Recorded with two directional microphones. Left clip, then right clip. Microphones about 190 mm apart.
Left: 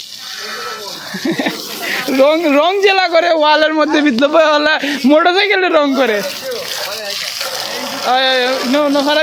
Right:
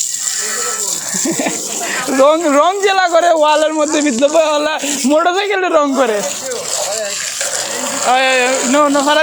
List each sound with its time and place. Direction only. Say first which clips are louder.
1.2 s speech: left 1 dB; 20° left (ahead or behind)
1.9 s speech: even; 30° left (ahead or behind)
8.0 s speech: right 1 dB; 5° left (ahead or behind)